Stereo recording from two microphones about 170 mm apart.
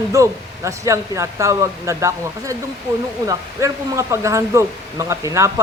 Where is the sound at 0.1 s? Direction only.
20° right (ahead or behind).